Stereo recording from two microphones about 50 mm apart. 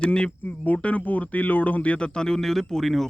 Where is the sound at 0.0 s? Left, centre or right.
Centre.